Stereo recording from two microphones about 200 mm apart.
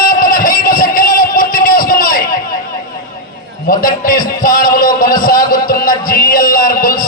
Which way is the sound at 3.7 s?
45° left (ahead or behind).